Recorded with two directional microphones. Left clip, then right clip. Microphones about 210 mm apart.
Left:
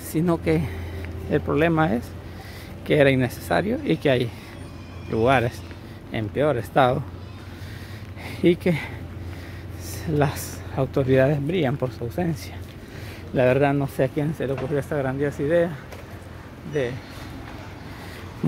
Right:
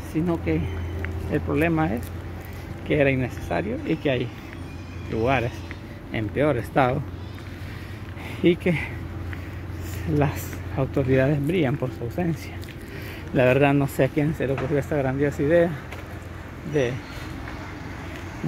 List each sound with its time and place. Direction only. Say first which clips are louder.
0.1 s speech: left 3 dB; 35° left (ahead or behind)
6.1 s speech: left 1 dB; 10° left (ahead or behind)
8.4 s speech: left 1 dB; 20° left (ahead or behind)
10.1 s speech: left 1 dB; 20° left (ahead or behind)
13.3 s speech: even; 10° left (ahead or behind)